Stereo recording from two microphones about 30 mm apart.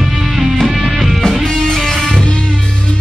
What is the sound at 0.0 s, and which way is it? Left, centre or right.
Music, centre.